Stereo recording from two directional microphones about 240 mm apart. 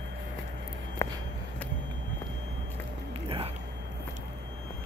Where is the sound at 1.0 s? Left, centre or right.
Centre.